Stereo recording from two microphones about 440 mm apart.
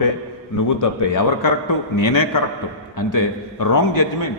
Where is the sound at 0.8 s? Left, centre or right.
Left.